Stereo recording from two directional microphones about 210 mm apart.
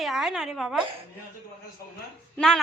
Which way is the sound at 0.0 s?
Centre (ahead or behind).